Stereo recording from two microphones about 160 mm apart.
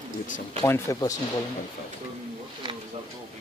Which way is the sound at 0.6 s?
15° left (ahead or behind).